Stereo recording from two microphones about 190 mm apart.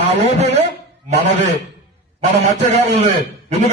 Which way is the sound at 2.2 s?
40° right (ahead or behind).